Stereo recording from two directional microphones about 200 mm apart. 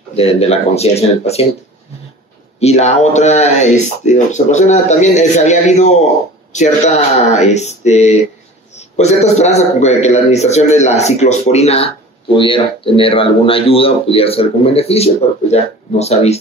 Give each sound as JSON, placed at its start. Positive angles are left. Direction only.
{"t": 0.1, "sound": "a man's voice", "side_deg": 30}
{"t": 2.6, "sound": "a man's voice", "side_deg": 35}